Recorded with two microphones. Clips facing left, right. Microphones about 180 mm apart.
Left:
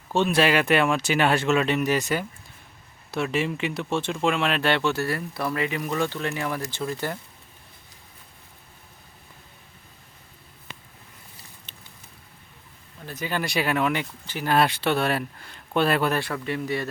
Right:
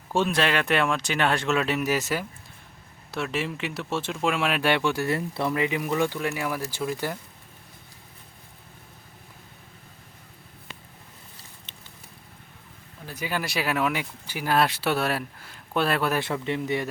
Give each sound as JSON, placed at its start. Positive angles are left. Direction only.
{"t": 0.3, "sound": "speech", "side_deg": 5}
{"t": 5.1, "sound": "speech", "side_deg": -25}
{"t": 11.7, "sound": "a sound", "side_deg": -20}
{"t": 13.1, "sound": "speech", "side_deg": -10}
{"t": 16.2, "sound": "a man's voice", "side_deg": -20}